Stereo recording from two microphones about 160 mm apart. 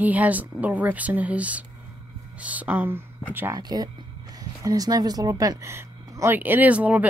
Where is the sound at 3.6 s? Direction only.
25° right (ahead or behind).